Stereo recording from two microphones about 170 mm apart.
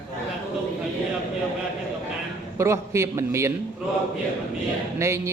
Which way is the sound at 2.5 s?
15° right (ahead or behind).